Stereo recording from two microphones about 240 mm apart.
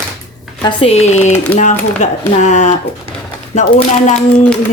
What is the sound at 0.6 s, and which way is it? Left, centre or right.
Speech, left.